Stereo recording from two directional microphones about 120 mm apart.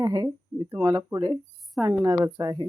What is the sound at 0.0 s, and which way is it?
Speech, 35° right (ahead or behind).